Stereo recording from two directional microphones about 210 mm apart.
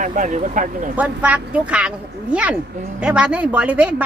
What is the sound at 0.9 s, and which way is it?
Speech, 5° right (ahead or behind).